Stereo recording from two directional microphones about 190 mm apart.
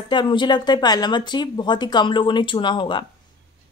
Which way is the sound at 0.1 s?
25° left (ahead or behind).